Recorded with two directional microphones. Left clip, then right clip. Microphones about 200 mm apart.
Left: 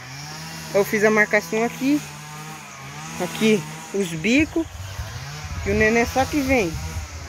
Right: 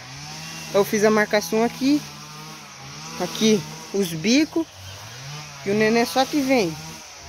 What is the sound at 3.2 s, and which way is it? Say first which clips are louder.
Speech: even; 10° right (ahead or behind).